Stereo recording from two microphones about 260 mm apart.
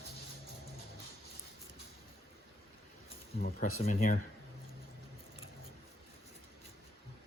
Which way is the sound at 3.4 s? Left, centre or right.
Left.